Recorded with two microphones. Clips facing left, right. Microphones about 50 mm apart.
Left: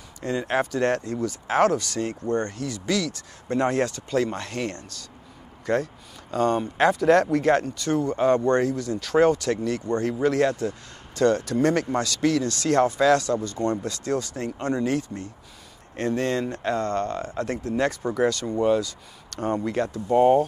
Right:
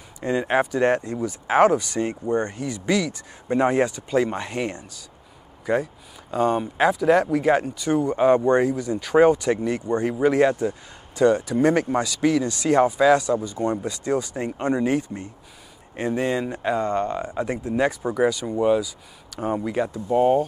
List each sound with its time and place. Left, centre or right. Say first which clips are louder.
0.2 s speech: right 3 dB; centre